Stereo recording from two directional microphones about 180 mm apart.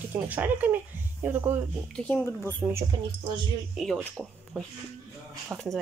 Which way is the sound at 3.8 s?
Centre (ahead or behind).